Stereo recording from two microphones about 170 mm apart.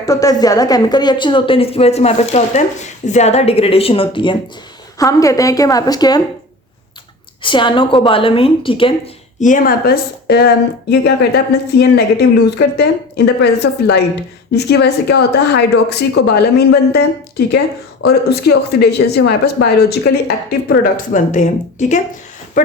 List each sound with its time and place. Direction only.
0.0 s a woman's voice: 20° left (ahead or behind)
7.4 s a woman's voice: 30° left (ahead or behind)
9.4 s speech: 50° left (ahead or behind)